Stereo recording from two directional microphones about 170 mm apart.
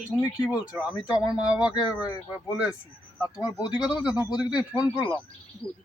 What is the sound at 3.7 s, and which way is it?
Speech, 5° right (ahead or behind).